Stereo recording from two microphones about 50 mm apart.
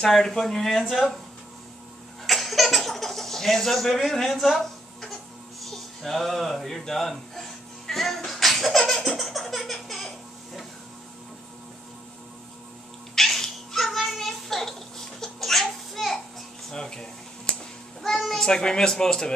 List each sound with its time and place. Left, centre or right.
0.0 s speech: centre
2.2 s baby laughter: centre
5.6 s music: centre
13.1 s cat: centre
16.7 s a sound: centre
18.0 s a child's voice: centre